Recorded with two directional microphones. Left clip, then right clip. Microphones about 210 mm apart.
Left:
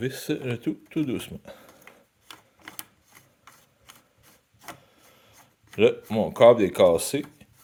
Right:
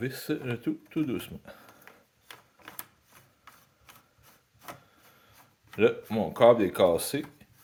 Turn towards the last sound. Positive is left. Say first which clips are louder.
# left 4 dB
turn(degrees=30)  # may be behind; listen again after turning